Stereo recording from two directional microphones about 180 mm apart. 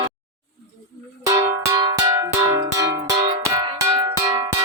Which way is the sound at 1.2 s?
20° right (ahead or behind).